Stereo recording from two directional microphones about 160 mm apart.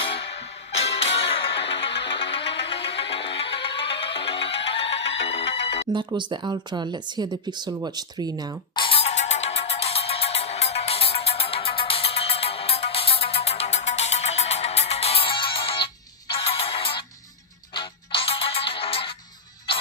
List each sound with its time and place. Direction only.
0.7 s music: 40° left (ahead or behind)
5.9 s speech: 30° right (ahead or behind)
8.7 s music: 35° left (ahead or behind)